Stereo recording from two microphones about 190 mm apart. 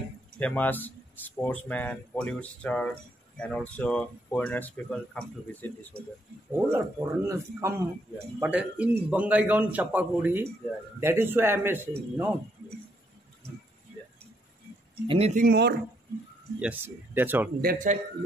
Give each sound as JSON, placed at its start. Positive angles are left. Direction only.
{"t": 0.4, "sound": "speech", "side_deg": 10}
{"t": 6.5, "sound": "a man's voice", "side_deg": -15}
{"t": 15.0, "sound": "speech", "side_deg": -35}
{"t": 15.4, "sound": "speech", "side_deg": -60}
{"t": 16.5, "sound": "a man's voice", "side_deg": -10}
{"t": 17.6, "sound": "speech", "side_deg": -45}